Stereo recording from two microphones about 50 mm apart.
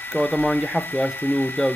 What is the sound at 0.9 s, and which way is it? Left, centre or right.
Speech, left.